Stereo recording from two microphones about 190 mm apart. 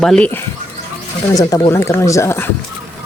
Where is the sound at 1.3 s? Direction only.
20° left (ahead or behind).